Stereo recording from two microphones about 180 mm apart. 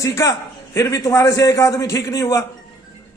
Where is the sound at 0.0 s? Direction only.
15° left (ahead or behind).